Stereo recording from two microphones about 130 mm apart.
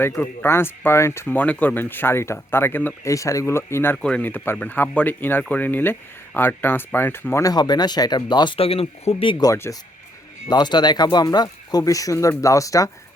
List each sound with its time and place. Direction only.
0.0 s speech: 20° left (ahead or behind)
3.9 s speech: 5° left (ahead or behind)
7.5 s speech: 30° left (ahead or behind)
9.5 s speech: 25° left (ahead or behind)
10.5 s speech: 35° left (ahead or behind)